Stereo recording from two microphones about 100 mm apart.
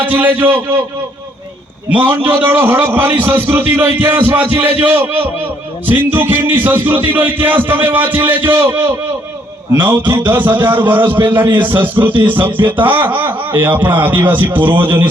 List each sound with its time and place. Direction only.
0.0 s a man's voice: 20° right (ahead or behind)
1.9 s a man's voice: 20° right (ahead or behind)